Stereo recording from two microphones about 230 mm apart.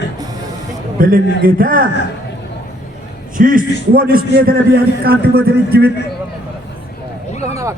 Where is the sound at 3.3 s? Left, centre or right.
Right.